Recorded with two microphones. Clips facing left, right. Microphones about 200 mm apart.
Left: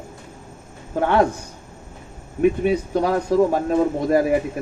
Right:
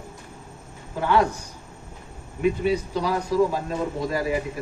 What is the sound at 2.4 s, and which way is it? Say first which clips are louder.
A man's voice: left 4 dB; 55° left (ahead or behind).